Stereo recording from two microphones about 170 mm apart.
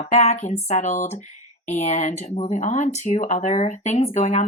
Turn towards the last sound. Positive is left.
turn(degrees=40)  # may be behind; listen again after turning